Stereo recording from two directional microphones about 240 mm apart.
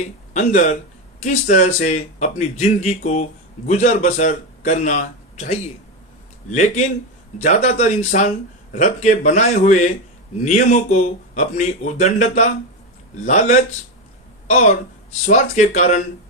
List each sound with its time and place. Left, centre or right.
0.3 s speech: left
15.3 s speech: left